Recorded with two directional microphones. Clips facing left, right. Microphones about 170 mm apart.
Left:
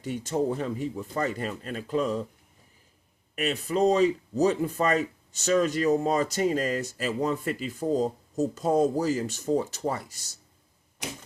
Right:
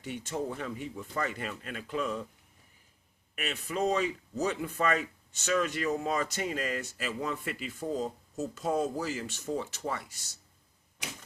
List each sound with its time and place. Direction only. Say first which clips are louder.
0.0 s speech: left 7 dB; 40° left (ahead or behind)
3.3 s speech: left 7 dB; 35° left (ahead or behind)